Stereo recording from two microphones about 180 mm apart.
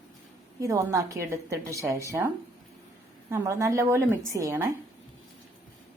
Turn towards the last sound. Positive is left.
turn(degrees=-15)  # may be behind; listen again after turning